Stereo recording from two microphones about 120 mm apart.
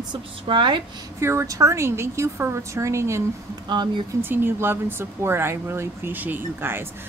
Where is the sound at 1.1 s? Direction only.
25° right (ahead or behind).